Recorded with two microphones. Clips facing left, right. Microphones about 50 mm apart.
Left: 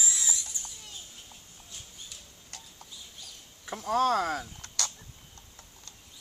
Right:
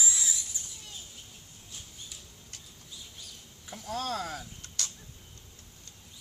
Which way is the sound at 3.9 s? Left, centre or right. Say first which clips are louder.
Left 8 dB; left.